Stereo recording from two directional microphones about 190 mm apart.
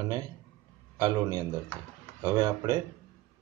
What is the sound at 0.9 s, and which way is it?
Speech, 20° right (ahead or behind).